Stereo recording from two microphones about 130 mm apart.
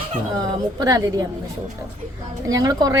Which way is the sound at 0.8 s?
25° right (ahead or behind).